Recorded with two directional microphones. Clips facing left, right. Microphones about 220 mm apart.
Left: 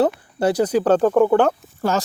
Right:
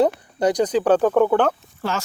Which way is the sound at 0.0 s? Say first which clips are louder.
Even; 5° left (ahead or behind).